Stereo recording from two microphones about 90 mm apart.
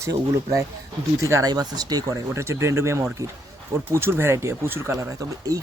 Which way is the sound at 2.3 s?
30° right (ahead or behind).